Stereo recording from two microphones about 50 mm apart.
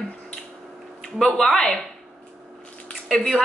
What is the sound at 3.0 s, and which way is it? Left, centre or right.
Speech, centre.